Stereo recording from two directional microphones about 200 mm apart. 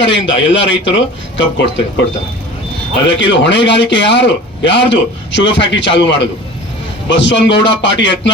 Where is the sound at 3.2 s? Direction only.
65° left (ahead or behind).